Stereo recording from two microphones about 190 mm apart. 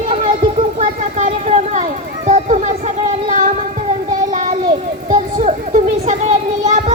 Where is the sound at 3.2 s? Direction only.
45° right (ahead or behind).